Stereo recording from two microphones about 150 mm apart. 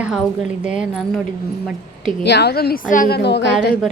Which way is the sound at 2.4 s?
90° left.